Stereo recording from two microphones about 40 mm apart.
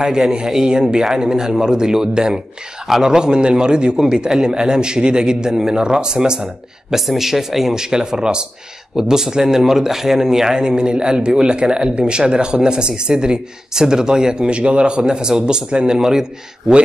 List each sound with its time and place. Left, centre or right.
0.0 s speech: centre
7.0 s speech: centre